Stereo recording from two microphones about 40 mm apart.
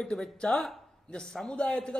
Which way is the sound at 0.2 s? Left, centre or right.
Centre.